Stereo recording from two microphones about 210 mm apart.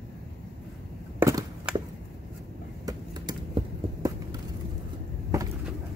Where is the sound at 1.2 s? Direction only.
10° right (ahead or behind).